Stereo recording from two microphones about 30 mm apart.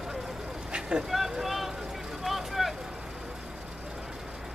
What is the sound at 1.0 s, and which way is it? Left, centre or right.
Vehicle, centre.